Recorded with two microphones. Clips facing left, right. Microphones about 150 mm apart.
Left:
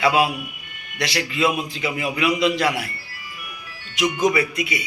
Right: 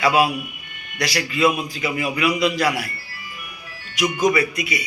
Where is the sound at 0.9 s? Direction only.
25° left (ahead or behind).